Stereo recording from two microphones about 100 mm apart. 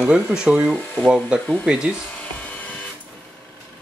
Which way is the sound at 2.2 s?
15° left (ahead or behind).